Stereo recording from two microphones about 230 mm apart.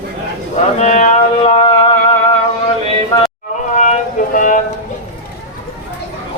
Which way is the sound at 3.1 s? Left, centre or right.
Centre.